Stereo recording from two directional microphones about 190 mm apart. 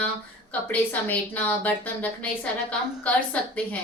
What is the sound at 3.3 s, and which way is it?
Speech, 5° left (ahead or behind).